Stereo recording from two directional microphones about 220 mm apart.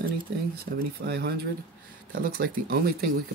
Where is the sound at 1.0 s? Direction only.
45° right (ahead or behind).